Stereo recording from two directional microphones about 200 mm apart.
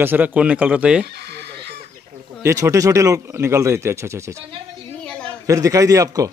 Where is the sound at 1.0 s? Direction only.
55° right (ahead or behind).